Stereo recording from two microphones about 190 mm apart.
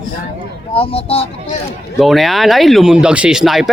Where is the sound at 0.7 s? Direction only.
30° left (ahead or behind).